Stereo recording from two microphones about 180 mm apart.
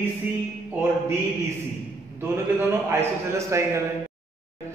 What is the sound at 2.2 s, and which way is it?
A man's voice, 15° right (ahead or behind).